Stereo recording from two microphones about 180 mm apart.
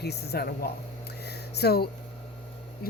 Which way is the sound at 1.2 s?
65° left (ahead or behind).